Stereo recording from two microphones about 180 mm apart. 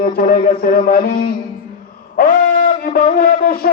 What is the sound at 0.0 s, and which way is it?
A man's voice, 55° left (ahead or behind).